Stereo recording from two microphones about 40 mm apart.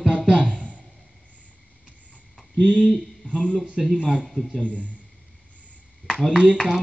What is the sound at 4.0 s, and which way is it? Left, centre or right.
Speech, left.